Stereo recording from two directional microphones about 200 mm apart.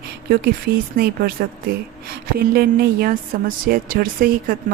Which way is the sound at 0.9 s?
50° right (ahead or behind).